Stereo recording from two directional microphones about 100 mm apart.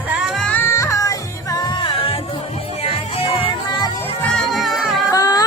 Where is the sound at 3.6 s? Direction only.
45° left (ahead or behind).